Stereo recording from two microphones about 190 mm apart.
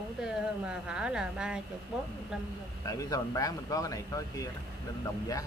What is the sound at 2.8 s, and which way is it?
Speech, 15° left (ahead or behind).